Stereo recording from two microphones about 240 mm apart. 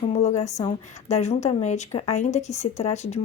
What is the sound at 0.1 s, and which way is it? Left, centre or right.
A woman's voice, left.